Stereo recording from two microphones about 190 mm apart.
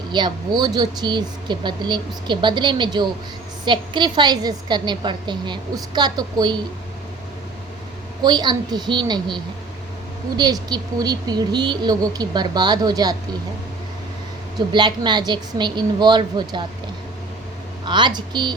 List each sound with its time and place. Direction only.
0.1 s speech: 25° right (ahead or behind)
8.2 s speech: 20° right (ahead or behind)
14.7 s speech: 25° right (ahead or behind)
17.8 s speech: 25° right (ahead or behind)